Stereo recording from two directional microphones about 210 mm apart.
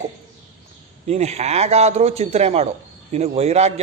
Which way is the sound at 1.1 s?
30° right (ahead or behind).